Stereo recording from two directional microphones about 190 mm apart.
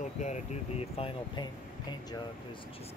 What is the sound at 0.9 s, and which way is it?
Speech, 25° left (ahead or behind).